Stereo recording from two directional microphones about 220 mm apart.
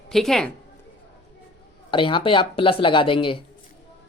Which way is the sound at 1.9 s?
20° left (ahead or behind).